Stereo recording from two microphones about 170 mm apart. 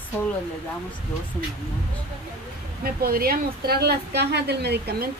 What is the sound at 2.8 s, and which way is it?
Speech, 60° right (ahead or behind).